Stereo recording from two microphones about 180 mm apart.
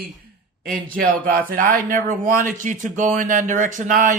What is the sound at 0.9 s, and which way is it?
Speech, 50° right (ahead or behind).